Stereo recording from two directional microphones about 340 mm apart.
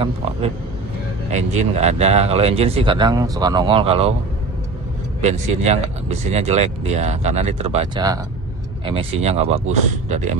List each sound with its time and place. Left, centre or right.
0.0 s speech: centre
5.2 s speech: centre